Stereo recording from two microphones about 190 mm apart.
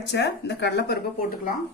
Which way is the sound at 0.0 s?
65° left (ahead or behind).